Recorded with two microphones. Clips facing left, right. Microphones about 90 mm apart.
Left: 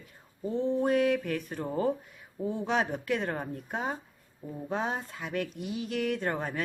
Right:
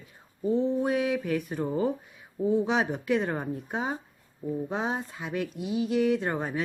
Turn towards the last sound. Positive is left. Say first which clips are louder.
# right 3 dB
turn(degrees=-15)  # may be behind; listen again after turning